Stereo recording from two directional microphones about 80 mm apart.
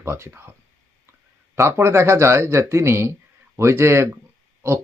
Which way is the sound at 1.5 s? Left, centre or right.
Right.